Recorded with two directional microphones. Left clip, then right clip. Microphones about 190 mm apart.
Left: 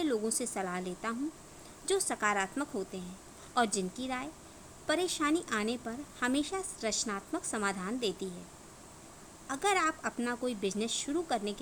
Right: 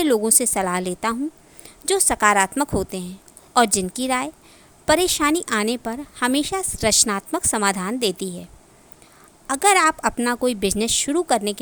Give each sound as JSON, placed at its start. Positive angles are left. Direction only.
{"t": 0.0, "sound": "speech", "side_deg": -50}
{"t": 9.5, "sound": "speech", "side_deg": -55}